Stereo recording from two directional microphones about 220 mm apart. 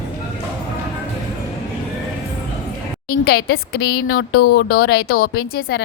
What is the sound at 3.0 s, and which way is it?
A woman's voice, 45° left (ahead or behind).